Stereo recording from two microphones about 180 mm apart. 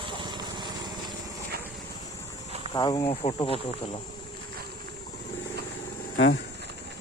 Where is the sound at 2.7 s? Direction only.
25° left (ahead or behind).